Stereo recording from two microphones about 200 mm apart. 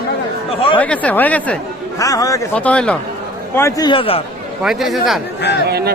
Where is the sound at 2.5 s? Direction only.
5° left (ahead or behind); by 4.2 s 30° left (ahead or behind).